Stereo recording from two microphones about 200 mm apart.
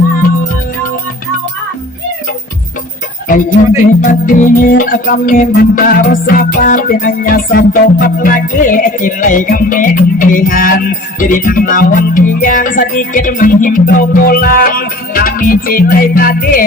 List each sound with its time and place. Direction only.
4.0 s music: 45° left (ahead or behind)